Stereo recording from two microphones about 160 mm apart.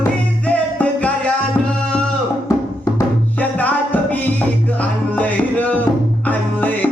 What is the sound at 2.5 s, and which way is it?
Music, 20° left (ahead or behind).